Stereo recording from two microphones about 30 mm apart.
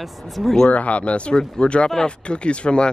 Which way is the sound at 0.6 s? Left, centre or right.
Left.